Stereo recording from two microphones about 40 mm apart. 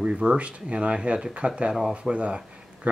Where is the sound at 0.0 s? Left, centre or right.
Right.